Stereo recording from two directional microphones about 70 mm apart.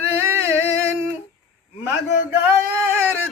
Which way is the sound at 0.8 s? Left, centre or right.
Right.